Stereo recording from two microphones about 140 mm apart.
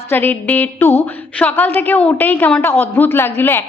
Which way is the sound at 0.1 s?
15° left (ahead or behind).